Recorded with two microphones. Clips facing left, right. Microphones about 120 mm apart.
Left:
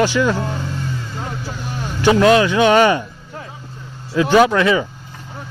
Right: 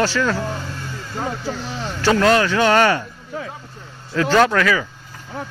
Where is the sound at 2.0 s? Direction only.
15° left (ahead or behind).